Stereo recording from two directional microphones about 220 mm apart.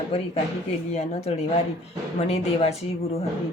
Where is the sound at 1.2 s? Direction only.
30° left (ahead or behind).